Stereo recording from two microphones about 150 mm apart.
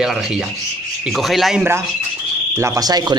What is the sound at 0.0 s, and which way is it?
Speech, 5° right (ahead or behind).